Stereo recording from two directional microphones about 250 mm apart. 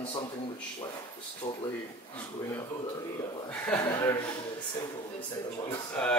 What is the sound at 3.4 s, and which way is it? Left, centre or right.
Speech, centre.